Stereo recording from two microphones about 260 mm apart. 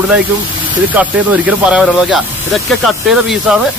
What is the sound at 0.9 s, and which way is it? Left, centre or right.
Speech, centre.